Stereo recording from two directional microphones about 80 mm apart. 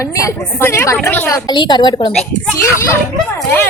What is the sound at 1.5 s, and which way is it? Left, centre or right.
Speech, left.